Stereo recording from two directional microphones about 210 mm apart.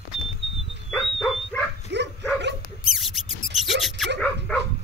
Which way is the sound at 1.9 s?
55° right (ahead or behind).